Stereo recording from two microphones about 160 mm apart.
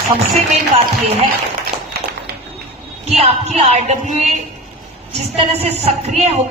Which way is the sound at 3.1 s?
40° right (ahead or behind).